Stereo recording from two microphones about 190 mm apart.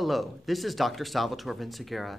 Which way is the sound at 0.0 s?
Centre (ahead or behind).